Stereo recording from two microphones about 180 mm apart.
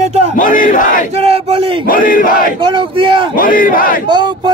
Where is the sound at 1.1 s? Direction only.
35° right (ahead or behind).